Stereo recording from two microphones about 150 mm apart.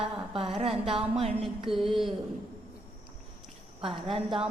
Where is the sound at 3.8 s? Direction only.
40° right (ahead or behind).